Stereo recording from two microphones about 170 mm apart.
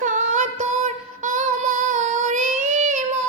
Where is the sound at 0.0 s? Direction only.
50° right (ahead or behind).